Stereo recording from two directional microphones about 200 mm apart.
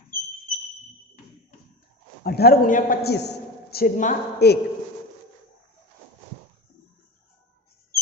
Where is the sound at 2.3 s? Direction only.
50° left (ahead or behind).